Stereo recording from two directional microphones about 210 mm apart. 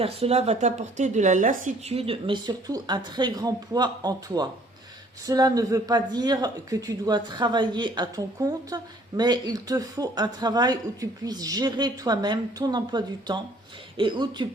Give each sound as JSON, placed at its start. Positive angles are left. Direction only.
{"t": 0.0, "sound": "speech", "side_deg": -30}